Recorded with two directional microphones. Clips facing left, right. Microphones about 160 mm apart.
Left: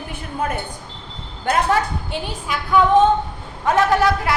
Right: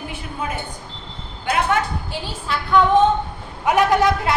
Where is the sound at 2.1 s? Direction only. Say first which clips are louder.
Left 1 dB; 15° left (ahead or behind).